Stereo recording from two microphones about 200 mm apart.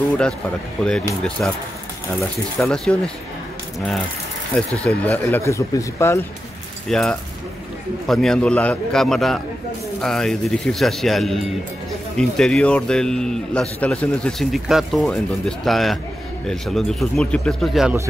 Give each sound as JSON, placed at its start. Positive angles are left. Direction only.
{"t": 0.8, "sound": "a man's voice", "side_deg": 5}
{"t": 2.6, "sound": "a man's voice", "side_deg": 5}
{"t": 4.8, "sound": "speech", "side_deg": 5}
{"t": 6.9, "sound": "a man's voice", "side_deg": 0}